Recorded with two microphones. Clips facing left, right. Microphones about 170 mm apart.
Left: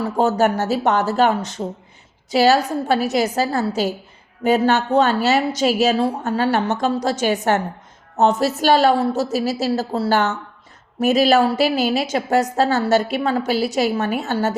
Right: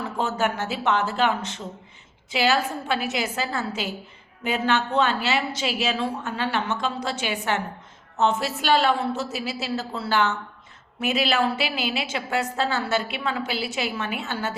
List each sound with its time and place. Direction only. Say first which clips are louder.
0.0 s a woman's voice: left 8 dB; 40° left (ahead or behind)